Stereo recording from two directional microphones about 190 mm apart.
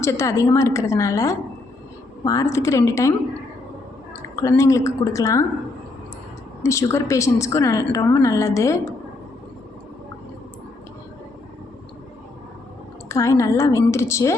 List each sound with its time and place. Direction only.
0.0 s a woman's voice: 15° left (ahead or behind)
4.4 s a woman's voice: 15° left (ahead or behind)
6.6 s a woman's voice: 15° left (ahead or behind)
13.1 s a woman's voice: 15° left (ahead or behind)